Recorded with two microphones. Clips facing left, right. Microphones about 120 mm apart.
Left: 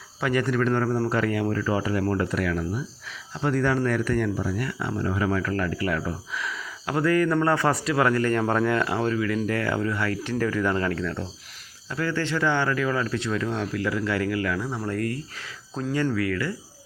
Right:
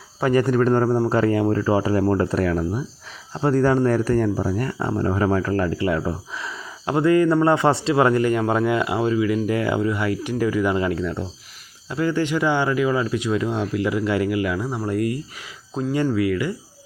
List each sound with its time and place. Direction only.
0.2 s a man's voice: 35° right (ahead or behind)
8.3 s speech: 10° right (ahead or behind)